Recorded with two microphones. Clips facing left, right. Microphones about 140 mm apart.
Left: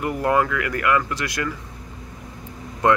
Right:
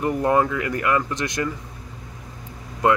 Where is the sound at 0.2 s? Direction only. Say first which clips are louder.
Left 1 dB; 25° right (ahead or behind).